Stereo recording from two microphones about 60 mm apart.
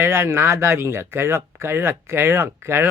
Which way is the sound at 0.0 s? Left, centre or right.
Right.